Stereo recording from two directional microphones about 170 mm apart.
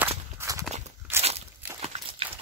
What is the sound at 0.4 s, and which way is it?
Horse, 20° right (ahead or behind).